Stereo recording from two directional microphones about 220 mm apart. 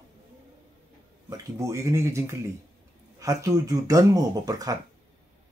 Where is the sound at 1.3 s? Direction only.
15° right (ahead or behind).